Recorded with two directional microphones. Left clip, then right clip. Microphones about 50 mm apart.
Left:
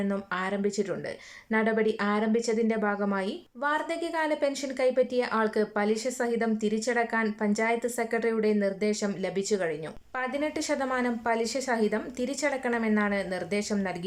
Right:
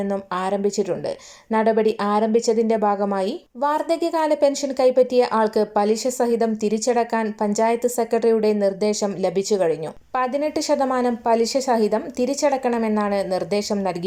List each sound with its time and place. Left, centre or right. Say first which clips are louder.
0.3 s a woman's voice: right 8 dB; right